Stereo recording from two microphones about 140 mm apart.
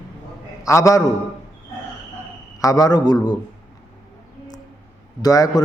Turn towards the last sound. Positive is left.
turn(degrees=25)  # may be behind; listen again after turning